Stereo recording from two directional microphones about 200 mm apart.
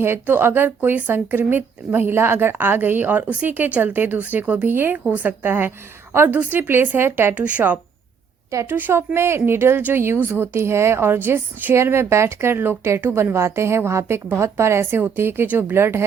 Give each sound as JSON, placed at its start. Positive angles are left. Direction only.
{"t": 0.0, "sound": "speech", "side_deg": -10}